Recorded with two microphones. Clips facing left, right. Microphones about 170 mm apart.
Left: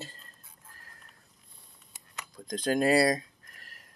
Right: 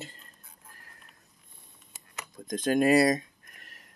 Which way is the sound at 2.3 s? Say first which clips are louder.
Right 2 dB; 20° right (ahead or behind).